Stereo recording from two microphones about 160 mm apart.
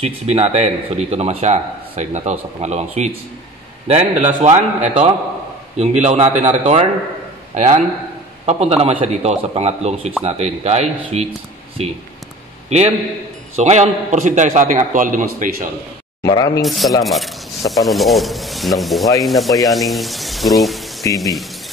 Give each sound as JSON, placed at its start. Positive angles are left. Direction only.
{"t": 0.0, "sound": "a man's voice", "side_deg": -40}
{"t": 16.3, "sound": "speech", "side_deg": 25}
{"t": 16.6, "sound": "speech", "side_deg": 0}
{"t": 21.0, "sound": "speech", "side_deg": 20}